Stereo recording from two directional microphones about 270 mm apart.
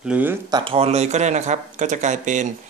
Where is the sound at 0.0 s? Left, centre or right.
Centre.